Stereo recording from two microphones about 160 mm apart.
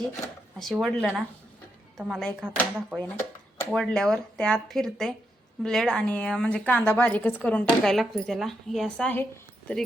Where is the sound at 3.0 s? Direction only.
10° left (ahead or behind).